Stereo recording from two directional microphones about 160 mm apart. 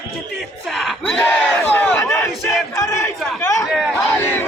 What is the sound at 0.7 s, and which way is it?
Battle cry, centre (ahead or behind).